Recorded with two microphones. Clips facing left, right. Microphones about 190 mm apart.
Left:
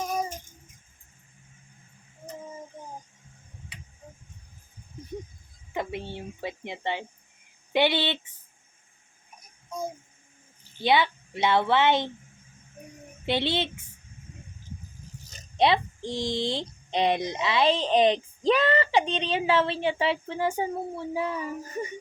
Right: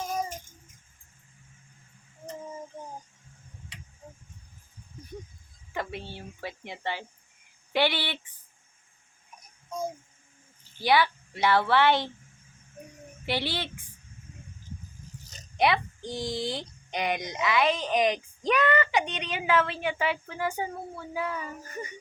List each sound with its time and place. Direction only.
5.7 s speech: 20° left (ahead or behind)
10.8 s speech: 20° left (ahead or behind)
13.2 s speech: 20° left (ahead or behind)
15.5 s speech: 30° left (ahead or behind)